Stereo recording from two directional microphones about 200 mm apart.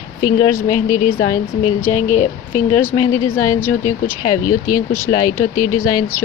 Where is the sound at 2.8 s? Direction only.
10° left (ahead or behind).